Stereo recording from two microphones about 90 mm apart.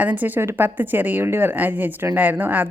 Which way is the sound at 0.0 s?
20° right (ahead or behind).